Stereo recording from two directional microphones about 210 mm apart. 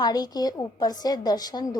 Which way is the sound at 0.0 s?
20° left (ahead or behind).